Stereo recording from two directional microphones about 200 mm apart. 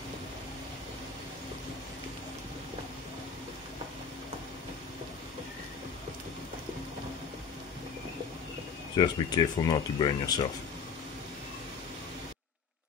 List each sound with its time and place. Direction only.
8.9 s speech: 20° left (ahead or behind)